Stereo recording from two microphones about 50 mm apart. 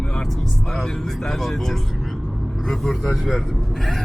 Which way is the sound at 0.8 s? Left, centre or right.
Centre.